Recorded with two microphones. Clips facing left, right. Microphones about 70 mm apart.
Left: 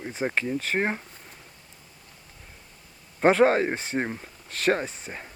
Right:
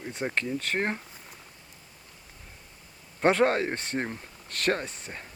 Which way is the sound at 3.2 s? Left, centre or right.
Centre.